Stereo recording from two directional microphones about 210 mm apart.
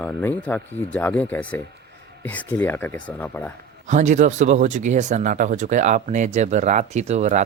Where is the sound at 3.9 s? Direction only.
35° right (ahead or behind).